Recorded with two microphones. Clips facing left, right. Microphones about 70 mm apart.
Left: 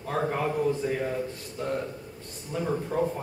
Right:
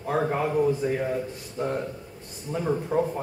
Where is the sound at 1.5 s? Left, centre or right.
Right.